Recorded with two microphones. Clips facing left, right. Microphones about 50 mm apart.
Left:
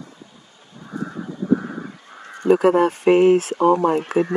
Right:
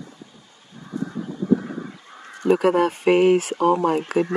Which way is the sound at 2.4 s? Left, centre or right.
Right.